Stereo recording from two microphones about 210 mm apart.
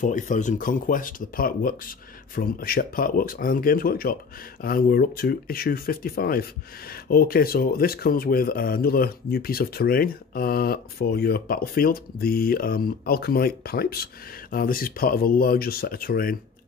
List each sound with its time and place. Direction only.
0.0 s speech: 35° left (ahead or behind)